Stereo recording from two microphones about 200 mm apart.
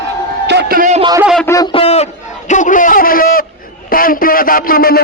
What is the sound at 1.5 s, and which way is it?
A man's voice, 20° left (ahead or behind).